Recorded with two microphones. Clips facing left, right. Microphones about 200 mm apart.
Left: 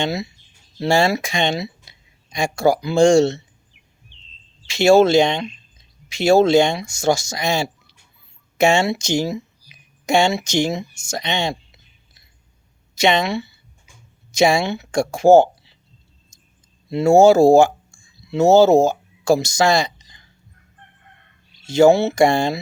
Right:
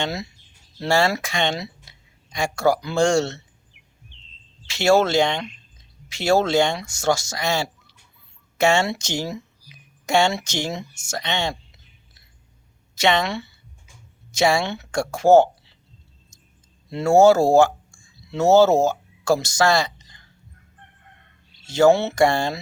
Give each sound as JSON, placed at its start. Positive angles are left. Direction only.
{"t": 0.0, "sound": "speech", "side_deg": 10}
{"t": 4.6, "sound": "speech", "side_deg": 15}
{"t": 13.0, "sound": "speech", "side_deg": 15}
{"t": 16.9, "sound": "speech", "side_deg": 10}
{"t": 21.7, "sound": "speech", "side_deg": 10}